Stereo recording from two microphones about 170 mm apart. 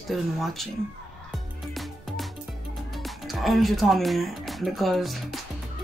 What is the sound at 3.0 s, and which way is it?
Speech, centre (ahead or behind).